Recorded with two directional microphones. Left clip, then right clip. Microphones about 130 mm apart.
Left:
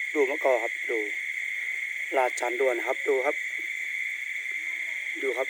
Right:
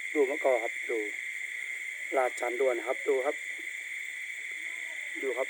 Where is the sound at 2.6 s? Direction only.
20° left (ahead or behind).